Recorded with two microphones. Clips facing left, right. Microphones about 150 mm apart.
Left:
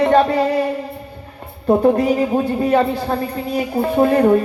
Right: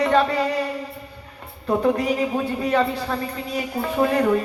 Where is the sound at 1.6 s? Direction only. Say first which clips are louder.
Left 6 dB; 30° left (ahead or behind).